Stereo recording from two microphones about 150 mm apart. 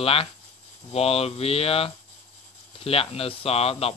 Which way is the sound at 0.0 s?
40° left (ahead or behind).